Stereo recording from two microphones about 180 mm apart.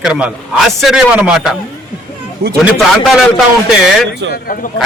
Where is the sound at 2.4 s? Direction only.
60° right (ahead or behind).